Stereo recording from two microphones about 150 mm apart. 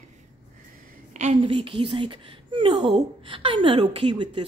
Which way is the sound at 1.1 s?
45° right (ahead or behind).